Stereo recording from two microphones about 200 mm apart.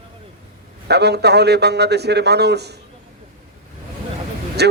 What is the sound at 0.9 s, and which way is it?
Speech, 55° right (ahead or behind).